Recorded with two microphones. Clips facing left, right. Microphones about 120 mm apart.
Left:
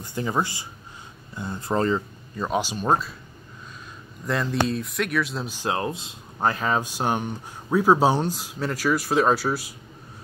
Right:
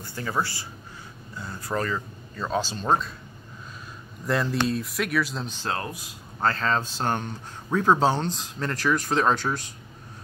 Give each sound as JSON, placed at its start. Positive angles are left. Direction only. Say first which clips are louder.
{"t": 0.0, "sound": "speech", "louder": "left 3 dB", "side_deg": 20}
{"t": 2.3, "sound": "speech", "louder": "left 2 dB", "side_deg": 15}
{"t": 4.3, "sound": "speech", "louder": "even", "side_deg": 0}